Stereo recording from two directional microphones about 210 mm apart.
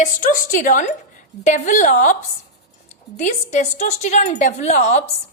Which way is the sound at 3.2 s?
35° left (ahead or behind).